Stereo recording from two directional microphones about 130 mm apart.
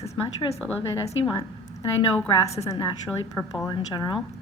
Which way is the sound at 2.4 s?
25° left (ahead or behind).